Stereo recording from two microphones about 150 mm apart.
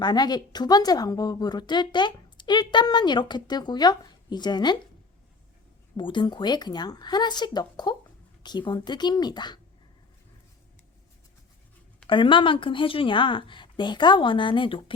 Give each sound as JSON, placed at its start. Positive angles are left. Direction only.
{"t": 0.0, "sound": "a woman's voice", "side_deg": 30}
{"t": 6.0, "sound": "a woman's voice", "side_deg": 30}
{"t": 12.0, "sound": "speech", "side_deg": 35}